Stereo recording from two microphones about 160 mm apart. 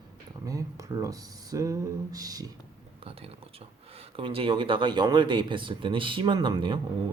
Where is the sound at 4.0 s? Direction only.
35° right (ahead or behind).